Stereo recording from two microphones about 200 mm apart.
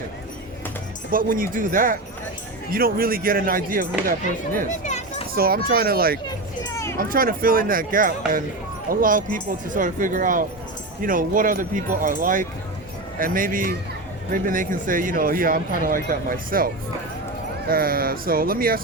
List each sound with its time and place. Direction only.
1.1 s speech: 45° right (ahead or behind)
4.9 s children playing: 35° left (ahead or behind)
5.3 s speech: 50° right (ahead or behind)
6.7 s a sound: 15° left (ahead or behind)
7.0 s speech: 45° right (ahead or behind)
17.7 s speech: 45° right (ahead or behind)